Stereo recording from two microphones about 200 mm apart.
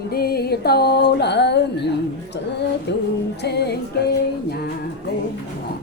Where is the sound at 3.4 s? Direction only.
55° left (ahead or behind).